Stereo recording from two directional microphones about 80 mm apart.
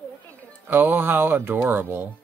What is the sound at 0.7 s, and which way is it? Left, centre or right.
Speech, right.